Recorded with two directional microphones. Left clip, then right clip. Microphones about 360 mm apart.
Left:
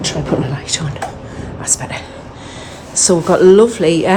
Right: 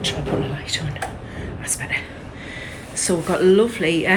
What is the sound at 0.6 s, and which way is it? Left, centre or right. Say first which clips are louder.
Speech: left 5 dB; centre.